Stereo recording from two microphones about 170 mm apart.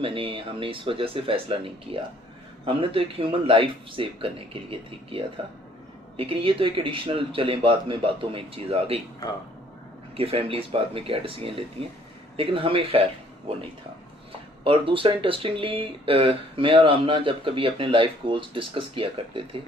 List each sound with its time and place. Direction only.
0.0 s speech: 30° right (ahead or behind)
6.1 s speech: 30° right (ahead or behind)
10.2 s speech: 35° right (ahead or behind)
14.6 s speech: 30° right (ahead or behind)